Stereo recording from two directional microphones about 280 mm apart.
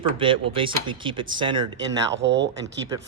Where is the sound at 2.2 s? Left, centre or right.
Right.